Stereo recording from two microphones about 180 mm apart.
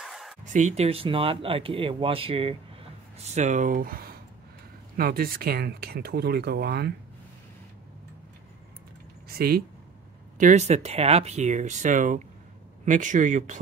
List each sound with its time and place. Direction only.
0.0 s a sound: centre (ahead or behind)
0.5 s speech: 40° right (ahead or behind); by 6.9 s 60° right (ahead or behind)
9.3 s speech: 60° right (ahead or behind)
10.3 s speech: 40° right (ahead or behind)